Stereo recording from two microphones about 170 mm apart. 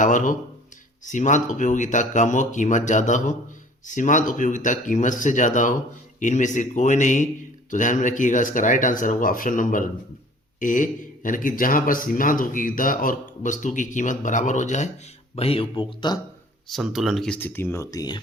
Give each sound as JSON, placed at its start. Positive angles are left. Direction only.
{"t": 0.0, "sound": "speech", "side_deg": 45}
{"t": 15.4, "sound": "speech", "side_deg": 35}
{"t": 16.6, "sound": "speech", "side_deg": 0}